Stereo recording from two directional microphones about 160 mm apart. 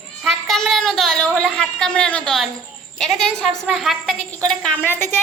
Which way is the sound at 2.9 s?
Centre (ahead or behind).